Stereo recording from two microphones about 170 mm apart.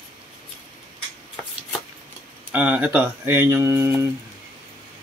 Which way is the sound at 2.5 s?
10° right (ahead or behind).